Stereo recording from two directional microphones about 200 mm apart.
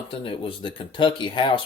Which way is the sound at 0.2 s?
25° left (ahead or behind).